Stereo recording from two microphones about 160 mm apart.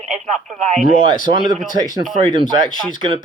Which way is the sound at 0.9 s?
30° right (ahead or behind).